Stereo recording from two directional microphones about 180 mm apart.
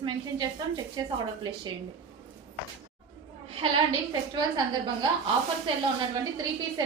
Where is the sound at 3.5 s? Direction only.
30° right (ahead or behind).